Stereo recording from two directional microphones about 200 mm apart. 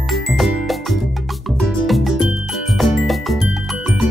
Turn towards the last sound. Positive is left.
turn(degrees=0)  # may be behind; listen again after turning